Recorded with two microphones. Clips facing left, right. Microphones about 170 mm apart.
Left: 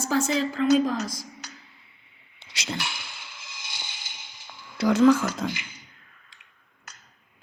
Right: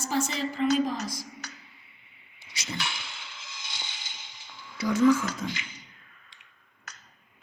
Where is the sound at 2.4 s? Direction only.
85° left.